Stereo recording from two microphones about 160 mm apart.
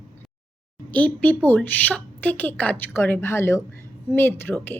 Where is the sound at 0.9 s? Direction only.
10° left (ahead or behind).